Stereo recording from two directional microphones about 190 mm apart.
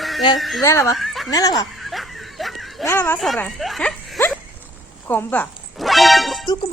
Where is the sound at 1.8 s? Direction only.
Centre (ahead or behind).